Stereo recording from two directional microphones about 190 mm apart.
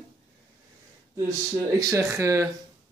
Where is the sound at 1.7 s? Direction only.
15° right (ahead or behind).